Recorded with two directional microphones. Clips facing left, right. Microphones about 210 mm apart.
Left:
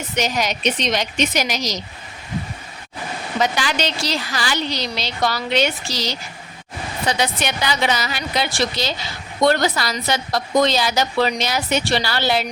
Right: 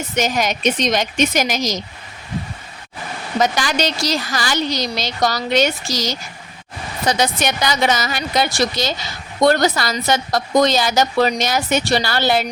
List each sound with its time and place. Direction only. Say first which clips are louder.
0.2 s a woman's voice: right 2 dB; 50° right (ahead or behind)
3.4 s a woman's voice: right 3 dB; 45° right (ahead or behind)